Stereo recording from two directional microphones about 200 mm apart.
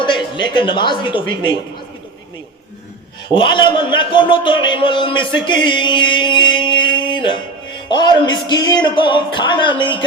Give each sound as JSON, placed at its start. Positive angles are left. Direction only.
{"t": 0.0, "sound": "a woman's voice", "side_deg": 25}
{"t": 3.2, "sound": "a man's voice", "side_deg": 25}